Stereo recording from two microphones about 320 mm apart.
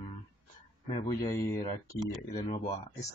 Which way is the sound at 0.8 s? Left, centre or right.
Centre.